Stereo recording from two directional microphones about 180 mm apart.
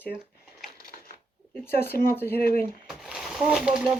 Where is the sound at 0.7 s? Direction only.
55° left (ahead or behind).